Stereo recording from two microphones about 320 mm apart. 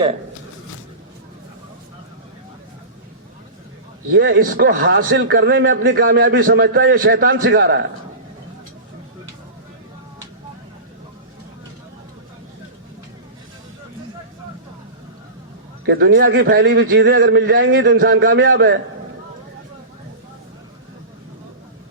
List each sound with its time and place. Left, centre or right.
4.1 s a man's voice: right
15.9 s a man's voice: right